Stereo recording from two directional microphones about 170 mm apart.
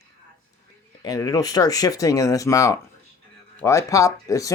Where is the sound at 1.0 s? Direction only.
20° left (ahead or behind).